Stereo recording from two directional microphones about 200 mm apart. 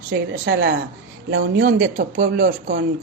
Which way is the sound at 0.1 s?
55° right (ahead or behind).